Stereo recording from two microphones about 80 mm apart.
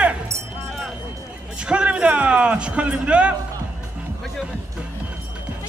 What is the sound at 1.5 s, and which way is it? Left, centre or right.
Speech, centre.